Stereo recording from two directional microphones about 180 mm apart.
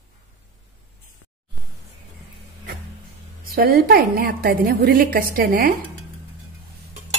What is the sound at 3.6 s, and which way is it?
A woman's voice, 55° right (ahead or behind).